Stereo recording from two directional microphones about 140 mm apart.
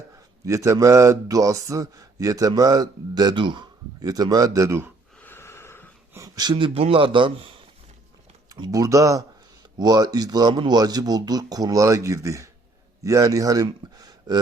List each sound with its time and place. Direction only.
0.4 s a man's voice: 20° right (ahead or behind)
5.2 s snort: 15° left (ahead or behind)
6.1 s a man's voice: 25° right (ahead or behind)